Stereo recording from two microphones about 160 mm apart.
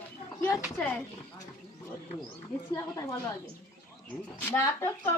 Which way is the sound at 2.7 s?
20° left (ahead or behind).